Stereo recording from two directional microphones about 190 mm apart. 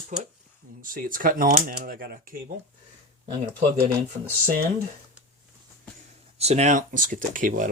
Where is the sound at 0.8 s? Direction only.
45° right (ahead or behind).